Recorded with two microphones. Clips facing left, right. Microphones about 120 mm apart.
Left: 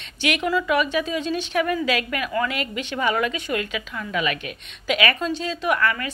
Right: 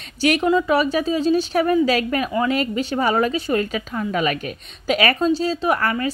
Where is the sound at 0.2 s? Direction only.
40° right (ahead or behind).